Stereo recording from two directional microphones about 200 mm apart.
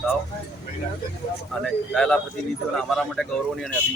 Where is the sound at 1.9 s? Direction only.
5° left (ahead or behind).